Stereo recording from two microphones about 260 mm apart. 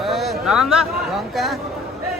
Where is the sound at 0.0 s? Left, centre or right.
Centre.